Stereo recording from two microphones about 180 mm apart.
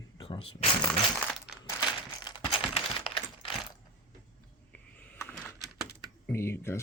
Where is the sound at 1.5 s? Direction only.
5° right (ahead or behind).